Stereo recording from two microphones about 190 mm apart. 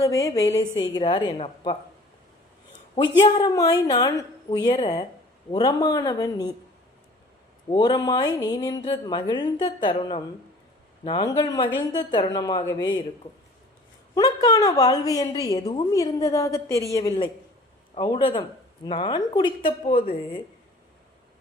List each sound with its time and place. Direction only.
0.0 s a woman's voice: 15° left (ahead or behind)
3.2 s a woman's voice: 25° left (ahead or behind)
7.7 s a woman's voice: 20° left (ahead or behind)
14.2 s a woman's voice: 20° left (ahead or behind)